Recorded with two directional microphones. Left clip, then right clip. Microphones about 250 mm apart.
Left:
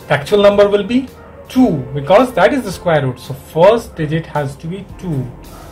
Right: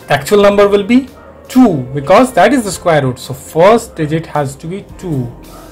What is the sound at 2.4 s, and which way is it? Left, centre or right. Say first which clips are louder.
A man's voice: right 3 dB; right.